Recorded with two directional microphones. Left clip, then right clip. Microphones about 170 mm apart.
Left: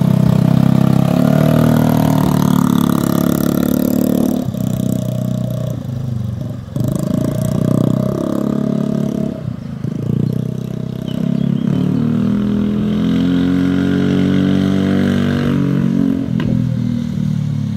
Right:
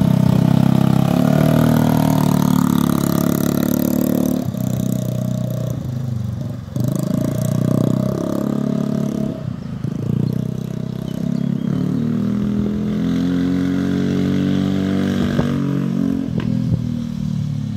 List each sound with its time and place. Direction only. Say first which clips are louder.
0.1 s vehicle: left 2 dB; 15° left (ahead or behind); by 3.7 s 15° right (ahead or behind)
6.9 s roar: left 3 dB; 10° right (ahead or behind)
13.0 s vehicle: left 4 dB; 5° right (ahead or behind)